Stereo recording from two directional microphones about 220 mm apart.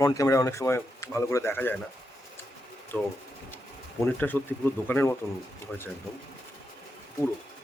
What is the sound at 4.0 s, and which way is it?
Speech, 10° left (ahead or behind).